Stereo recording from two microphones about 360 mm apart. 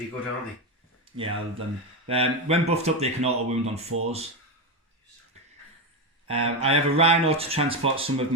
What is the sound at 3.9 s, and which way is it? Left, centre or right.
Speech, right.